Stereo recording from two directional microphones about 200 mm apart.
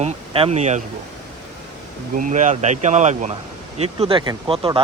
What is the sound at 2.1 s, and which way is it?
Speech, 40° right (ahead or behind).